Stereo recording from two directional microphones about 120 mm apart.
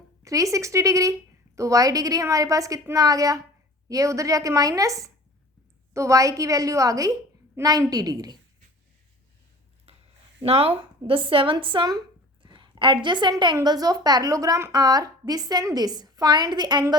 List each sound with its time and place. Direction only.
0.3 s a woman's voice: 25° right (ahead or behind)
10.4 s speech: 55° right (ahead or behind); by 16.8 s 40° right (ahead or behind)